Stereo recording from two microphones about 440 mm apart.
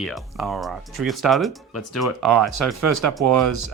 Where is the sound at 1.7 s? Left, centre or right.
Left.